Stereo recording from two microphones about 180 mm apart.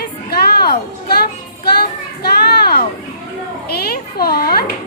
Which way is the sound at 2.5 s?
60° left (ahead or behind).